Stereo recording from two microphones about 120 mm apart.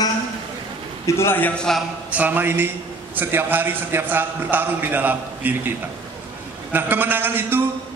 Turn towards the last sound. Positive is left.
turn(degrees=-15)  # may be behind; listen again after turning